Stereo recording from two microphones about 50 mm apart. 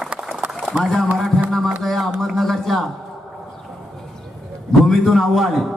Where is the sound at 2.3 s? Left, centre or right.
Centre.